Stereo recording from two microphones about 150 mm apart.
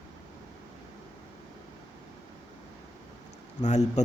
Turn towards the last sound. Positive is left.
turn(degrees=50)  # may be behind; listen again after turning